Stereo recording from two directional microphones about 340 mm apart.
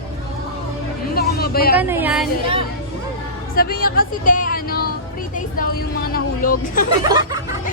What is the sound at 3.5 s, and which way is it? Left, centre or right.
Speech, left.